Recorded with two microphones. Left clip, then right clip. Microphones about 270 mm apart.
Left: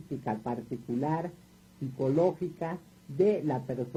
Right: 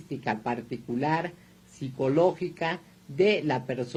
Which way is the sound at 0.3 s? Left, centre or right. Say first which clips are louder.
Right 5 dB; right.